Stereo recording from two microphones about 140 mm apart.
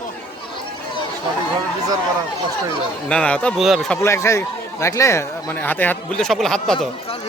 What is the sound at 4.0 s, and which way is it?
A man's voice, 20° left (ahead or behind).